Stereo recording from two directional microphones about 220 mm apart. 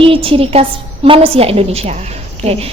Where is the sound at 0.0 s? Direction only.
25° right (ahead or behind).